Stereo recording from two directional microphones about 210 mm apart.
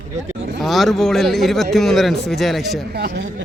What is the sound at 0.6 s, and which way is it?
A man's voice, centre (ahead or behind).